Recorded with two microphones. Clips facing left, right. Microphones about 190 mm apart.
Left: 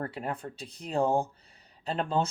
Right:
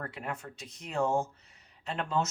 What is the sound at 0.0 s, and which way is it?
Speech, 35° left (ahead or behind).